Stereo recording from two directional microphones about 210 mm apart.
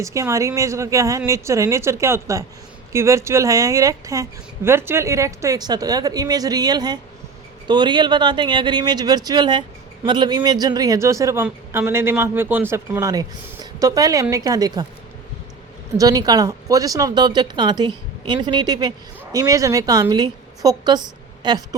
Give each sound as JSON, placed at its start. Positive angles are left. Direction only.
{"t": 0.0, "sound": "speech", "side_deg": -15}
{"t": 16.0, "sound": "speech", "side_deg": -15}